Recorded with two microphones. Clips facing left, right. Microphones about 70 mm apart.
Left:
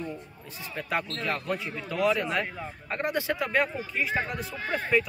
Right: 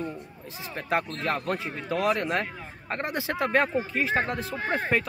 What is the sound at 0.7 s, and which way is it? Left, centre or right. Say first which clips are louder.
Speech: right 3 dB; right.